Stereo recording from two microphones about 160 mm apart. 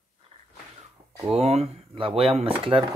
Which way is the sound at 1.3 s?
40° right (ahead or behind).